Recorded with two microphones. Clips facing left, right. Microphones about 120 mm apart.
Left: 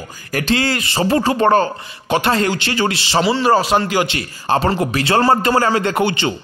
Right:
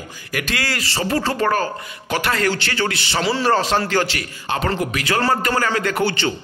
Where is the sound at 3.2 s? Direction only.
5° left (ahead or behind).